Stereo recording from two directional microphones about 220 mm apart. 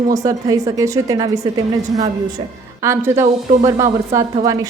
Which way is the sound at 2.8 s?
10° right (ahead or behind).